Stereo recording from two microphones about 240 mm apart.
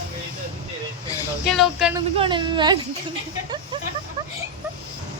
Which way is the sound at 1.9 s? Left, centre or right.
Right.